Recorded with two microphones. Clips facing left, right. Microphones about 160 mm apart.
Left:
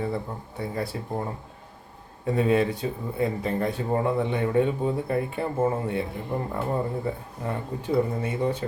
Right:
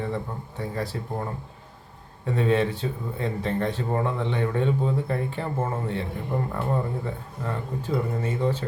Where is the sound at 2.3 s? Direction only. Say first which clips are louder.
Left 1 dB; 10° left (ahead or behind).